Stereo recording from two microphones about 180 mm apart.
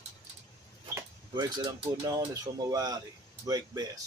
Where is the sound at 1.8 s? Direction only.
20° right (ahead or behind).